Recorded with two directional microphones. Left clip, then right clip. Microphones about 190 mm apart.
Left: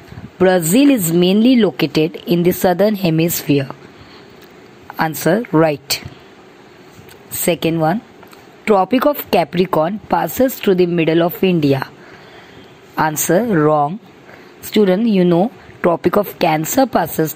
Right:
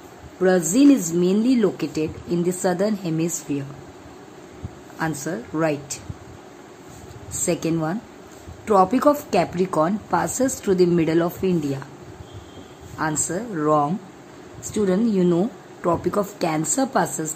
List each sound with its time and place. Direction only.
0.4 s speech: 35° left (ahead or behind)
4.9 s speech: 35° left (ahead or behind)
7.4 s speech: 25° left (ahead or behind)
12.9 s speech: 35° left (ahead or behind)